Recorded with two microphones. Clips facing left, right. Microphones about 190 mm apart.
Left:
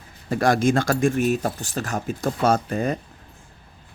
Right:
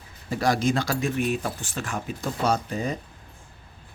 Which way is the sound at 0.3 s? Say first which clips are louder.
Left 4 dB; 55° left (ahead or behind).